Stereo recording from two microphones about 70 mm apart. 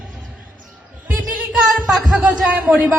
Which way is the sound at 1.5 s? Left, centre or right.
Centre.